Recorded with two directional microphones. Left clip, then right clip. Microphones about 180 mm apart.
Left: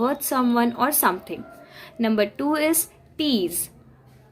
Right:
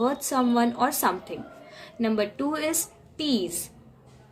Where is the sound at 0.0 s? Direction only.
45° left (ahead or behind).